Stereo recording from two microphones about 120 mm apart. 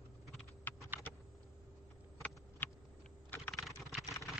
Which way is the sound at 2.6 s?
15° left (ahead or behind).